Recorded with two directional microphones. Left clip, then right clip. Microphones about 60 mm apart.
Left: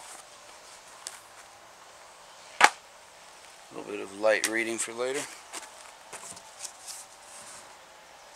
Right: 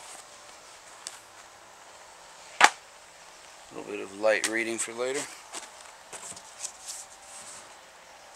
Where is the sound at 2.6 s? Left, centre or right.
Left.